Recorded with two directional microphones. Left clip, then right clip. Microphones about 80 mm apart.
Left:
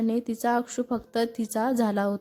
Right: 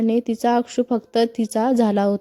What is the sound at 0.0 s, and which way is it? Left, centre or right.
Speech, right.